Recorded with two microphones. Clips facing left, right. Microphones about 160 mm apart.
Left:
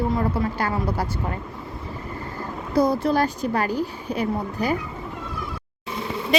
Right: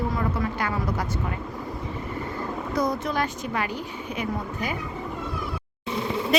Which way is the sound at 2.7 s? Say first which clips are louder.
Left 7 dB; 30° left (ahead or behind).